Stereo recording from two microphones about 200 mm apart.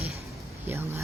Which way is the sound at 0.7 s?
10° right (ahead or behind).